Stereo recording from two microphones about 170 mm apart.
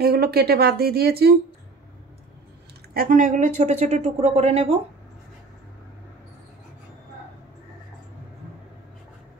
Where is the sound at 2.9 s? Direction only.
55° right (ahead or behind); by 4.7 s 35° right (ahead or behind).